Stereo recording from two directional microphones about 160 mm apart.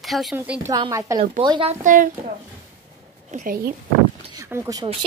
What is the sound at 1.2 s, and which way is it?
Speech, 30° right (ahead or behind).